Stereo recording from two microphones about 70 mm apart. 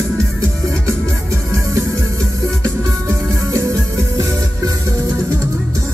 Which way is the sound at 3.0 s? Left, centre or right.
Right.